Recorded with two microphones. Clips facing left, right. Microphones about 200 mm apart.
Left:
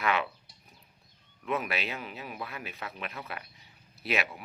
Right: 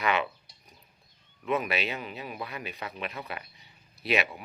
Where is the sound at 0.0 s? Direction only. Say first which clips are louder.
Right 2 dB; centre (ahead or behind).